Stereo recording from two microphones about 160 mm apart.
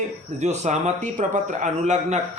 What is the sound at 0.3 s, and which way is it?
Speech, 45° right (ahead or behind).